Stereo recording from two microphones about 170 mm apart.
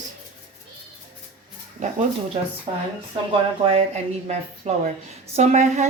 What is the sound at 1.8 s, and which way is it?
A woman's voice, 45° right (ahead or behind).